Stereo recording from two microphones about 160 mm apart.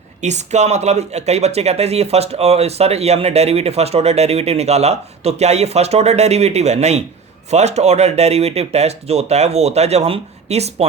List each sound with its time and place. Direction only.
0.2 s speech: 45° right (ahead or behind)